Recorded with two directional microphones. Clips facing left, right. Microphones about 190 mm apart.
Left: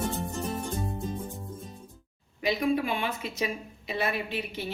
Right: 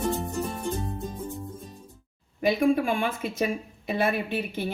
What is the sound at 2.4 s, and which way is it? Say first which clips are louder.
Speech: right 4 dB; 50° right (ahead or behind).